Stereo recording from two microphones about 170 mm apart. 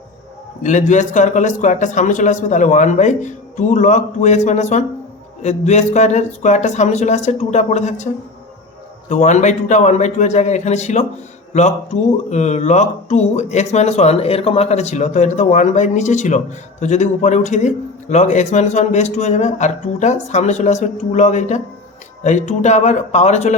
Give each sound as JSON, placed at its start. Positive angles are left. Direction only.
{"t": 0.6, "sound": "speech", "side_deg": 45}